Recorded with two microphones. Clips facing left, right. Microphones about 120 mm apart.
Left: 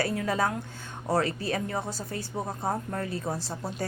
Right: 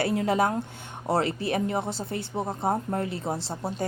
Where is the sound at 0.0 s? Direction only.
25° right (ahead or behind).